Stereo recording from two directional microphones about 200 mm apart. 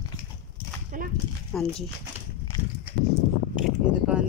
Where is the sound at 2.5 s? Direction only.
15° left (ahead or behind).